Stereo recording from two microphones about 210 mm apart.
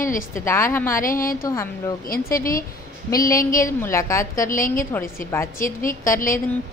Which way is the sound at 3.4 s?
40° left (ahead or behind).